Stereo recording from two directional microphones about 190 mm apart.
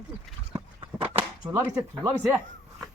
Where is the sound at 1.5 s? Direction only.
15° right (ahead or behind).